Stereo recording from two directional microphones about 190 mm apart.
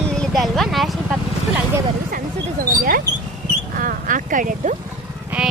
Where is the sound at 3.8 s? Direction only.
45° right (ahead or behind).